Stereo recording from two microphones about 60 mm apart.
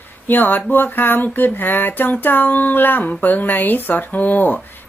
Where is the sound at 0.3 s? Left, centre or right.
Left.